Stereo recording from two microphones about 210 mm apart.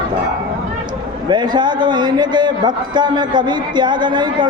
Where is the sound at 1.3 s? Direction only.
20° right (ahead or behind).